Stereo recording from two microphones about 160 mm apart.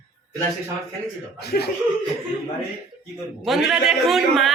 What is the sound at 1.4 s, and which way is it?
Speech, 90° left.